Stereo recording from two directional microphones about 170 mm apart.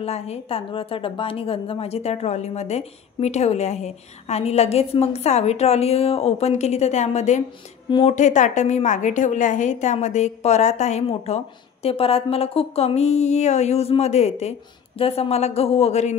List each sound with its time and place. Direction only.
0.0 s a woman's voice: 35° left (ahead or behind)